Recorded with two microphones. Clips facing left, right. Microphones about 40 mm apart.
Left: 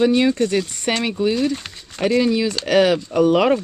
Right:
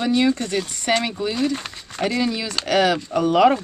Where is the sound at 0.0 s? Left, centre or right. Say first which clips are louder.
Left 3 dB; centre.